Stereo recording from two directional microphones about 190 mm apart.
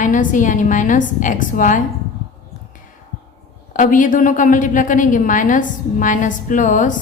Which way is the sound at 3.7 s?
45° left (ahead or behind).